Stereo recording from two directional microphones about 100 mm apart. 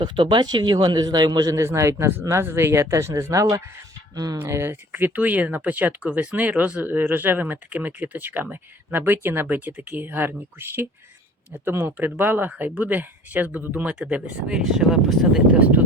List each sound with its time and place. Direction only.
0.0 s a man's voice: 50° right (ahead or behind)
4.4 s speech: 25° right (ahead or behind); by 15.5 s 5° right (ahead or behind)
15.5 s speech: 15° right (ahead or behind)